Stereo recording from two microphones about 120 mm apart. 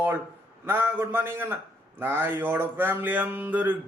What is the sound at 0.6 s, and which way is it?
Speech, 15° right (ahead or behind).